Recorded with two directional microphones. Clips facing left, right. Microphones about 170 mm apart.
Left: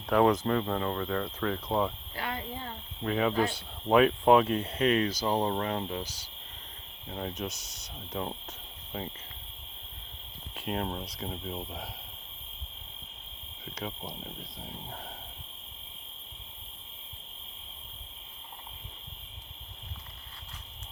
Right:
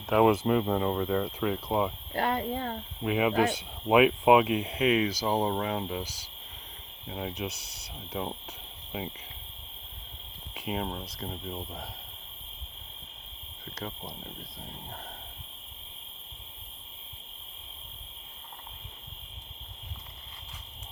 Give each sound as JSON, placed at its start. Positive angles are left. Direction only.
{"t": 0.1, "sound": "speech", "side_deg": -5}
{"t": 2.1, "sound": "a sound", "side_deg": -50}
{"t": 3.0, "sound": "speech", "side_deg": -10}
{"t": 10.5, "sound": "speech", "side_deg": 0}
{"t": 13.7, "sound": "speech", "side_deg": 5}